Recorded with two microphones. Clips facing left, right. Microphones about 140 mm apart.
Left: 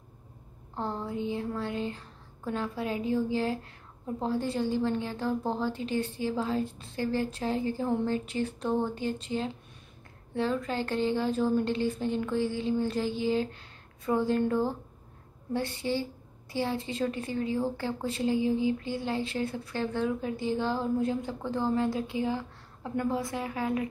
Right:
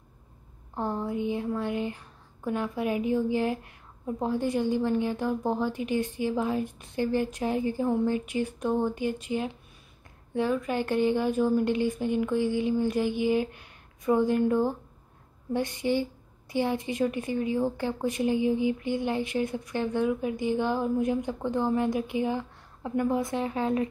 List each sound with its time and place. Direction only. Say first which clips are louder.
0.7 s a woman's voice: right 3 dB; 15° right (ahead or behind)